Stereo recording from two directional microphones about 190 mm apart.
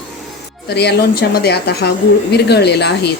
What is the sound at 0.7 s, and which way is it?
Speech, 60° left (ahead or behind).